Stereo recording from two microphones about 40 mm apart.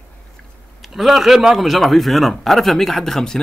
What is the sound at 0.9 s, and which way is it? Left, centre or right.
Speech, centre.